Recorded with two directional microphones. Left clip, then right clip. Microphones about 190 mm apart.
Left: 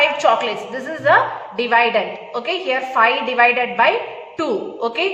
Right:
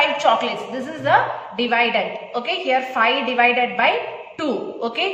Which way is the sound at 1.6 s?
20° left (ahead or behind).